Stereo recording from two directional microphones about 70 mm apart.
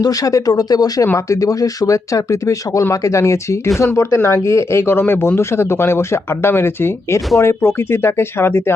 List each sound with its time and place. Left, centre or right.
0.0 s speech: left
1.0 s speech: left